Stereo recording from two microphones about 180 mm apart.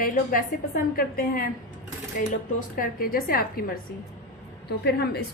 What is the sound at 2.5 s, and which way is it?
Speech, 50° left (ahead or behind).